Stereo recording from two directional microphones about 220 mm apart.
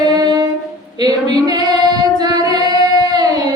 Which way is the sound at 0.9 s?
15° right (ahead or behind).